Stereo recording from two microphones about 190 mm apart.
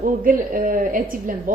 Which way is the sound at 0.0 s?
45° right (ahead or behind).